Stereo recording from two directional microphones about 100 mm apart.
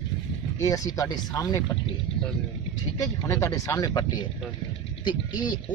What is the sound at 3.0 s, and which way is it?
Speech, 30° left (ahead or behind).